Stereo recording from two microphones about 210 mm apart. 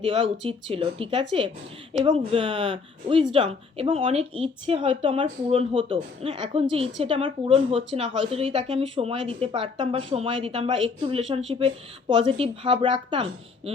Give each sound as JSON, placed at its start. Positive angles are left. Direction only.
{"t": 0.0, "sound": "a woman's voice", "side_deg": -25}